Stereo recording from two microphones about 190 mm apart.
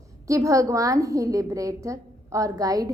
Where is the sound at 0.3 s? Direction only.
15° right (ahead or behind).